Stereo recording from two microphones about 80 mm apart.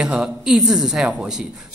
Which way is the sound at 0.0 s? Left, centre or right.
Centre.